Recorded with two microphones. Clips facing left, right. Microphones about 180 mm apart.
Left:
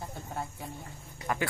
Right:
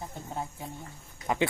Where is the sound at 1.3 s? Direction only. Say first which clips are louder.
Right 3 dB; 20° right (ahead or behind).